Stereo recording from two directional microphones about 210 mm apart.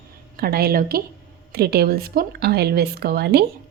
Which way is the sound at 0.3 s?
45° right (ahead or behind).